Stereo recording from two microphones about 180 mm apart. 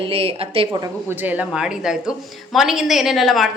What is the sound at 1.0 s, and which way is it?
A woman's voice, 10° right (ahead or behind).